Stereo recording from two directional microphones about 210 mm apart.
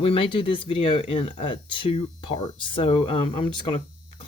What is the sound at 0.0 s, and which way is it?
Speech, 25° left (ahead or behind).